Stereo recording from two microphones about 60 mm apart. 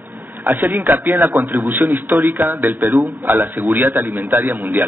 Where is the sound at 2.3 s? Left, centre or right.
Right.